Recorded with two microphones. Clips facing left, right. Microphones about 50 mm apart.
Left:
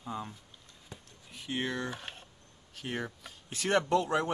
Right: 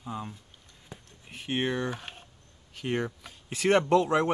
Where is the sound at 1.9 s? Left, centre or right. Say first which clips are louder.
Right 4 dB; centre.